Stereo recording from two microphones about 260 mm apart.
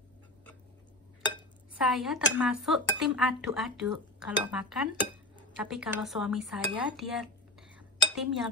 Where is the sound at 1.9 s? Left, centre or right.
Centre.